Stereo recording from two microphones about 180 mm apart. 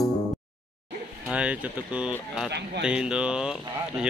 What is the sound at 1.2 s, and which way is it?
Speech, 5° right (ahead or behind).